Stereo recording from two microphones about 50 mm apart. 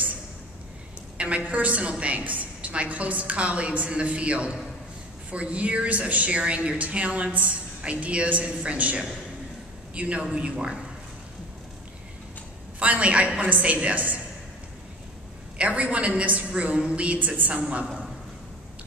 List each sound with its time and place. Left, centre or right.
1.1 s a woman's voice: right
12.7 s a woman's voice: right
15.5 s a woman's voice: right